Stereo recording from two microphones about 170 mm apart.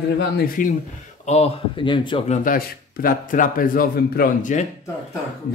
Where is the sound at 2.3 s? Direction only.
55° left (ahead or behind).